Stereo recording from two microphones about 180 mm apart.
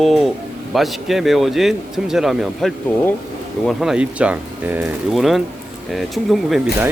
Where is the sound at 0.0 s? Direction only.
Centre (ahead or behind).